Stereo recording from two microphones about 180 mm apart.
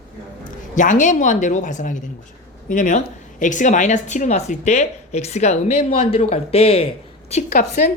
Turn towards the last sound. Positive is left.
turn(degrees=40)  # may be behind; listen again after turning